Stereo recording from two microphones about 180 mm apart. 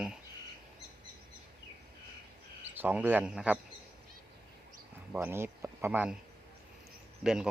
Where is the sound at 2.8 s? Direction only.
10° right (ahead or behind).